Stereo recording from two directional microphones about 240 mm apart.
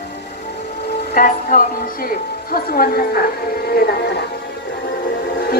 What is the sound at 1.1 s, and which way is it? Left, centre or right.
Speech, left.